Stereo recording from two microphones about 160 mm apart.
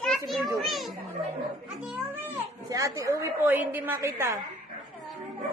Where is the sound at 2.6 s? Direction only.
20° right (ahead or behind).